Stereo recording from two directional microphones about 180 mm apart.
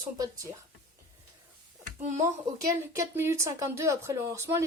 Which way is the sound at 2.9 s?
15° right (ahead or behind).